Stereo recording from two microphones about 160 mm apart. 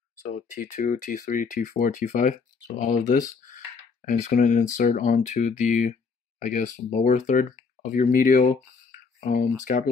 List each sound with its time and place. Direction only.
0.2 s speech: 50° left (ahead or behind)